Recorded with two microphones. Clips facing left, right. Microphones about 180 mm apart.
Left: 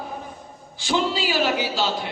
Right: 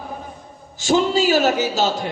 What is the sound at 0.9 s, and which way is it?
A man's voice, 45° right (ahead or behind).